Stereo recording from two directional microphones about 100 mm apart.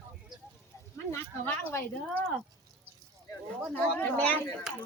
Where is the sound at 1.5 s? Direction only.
15° left (ahead or behind).